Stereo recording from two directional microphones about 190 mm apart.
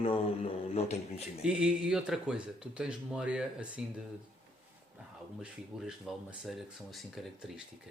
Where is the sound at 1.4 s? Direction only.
5° right (ahead or behind).